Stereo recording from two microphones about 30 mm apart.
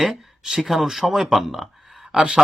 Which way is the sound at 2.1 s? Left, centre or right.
Right.